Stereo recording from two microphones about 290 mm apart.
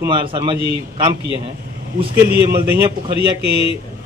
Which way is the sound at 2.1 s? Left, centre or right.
Right.